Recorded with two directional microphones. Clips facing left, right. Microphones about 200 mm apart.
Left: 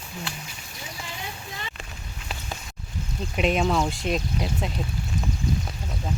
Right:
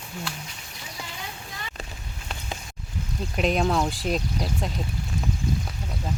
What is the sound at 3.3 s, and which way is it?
Speech, centre (ahead or behind).